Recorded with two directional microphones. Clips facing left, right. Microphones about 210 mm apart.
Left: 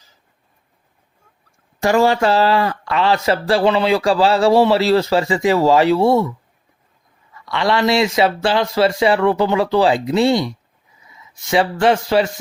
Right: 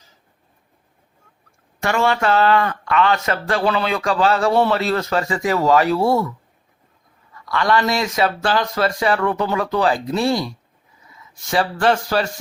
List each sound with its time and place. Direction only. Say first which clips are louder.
1.8 s speech: left 5 dB; 35° left (ahead or behind)
7.4 s speech: left 2 dB; 25° left (ahead or behind)
11.5 s speech: left 3 dB; 20° left (ahead or behind)